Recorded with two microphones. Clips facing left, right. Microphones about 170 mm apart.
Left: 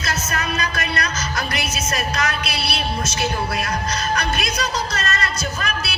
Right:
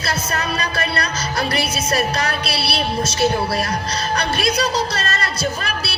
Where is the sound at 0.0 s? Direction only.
30° right (ahead or behind).